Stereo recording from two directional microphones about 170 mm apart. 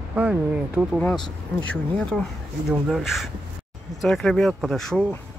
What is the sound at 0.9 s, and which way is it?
Speech, 5° left (ahead or behind).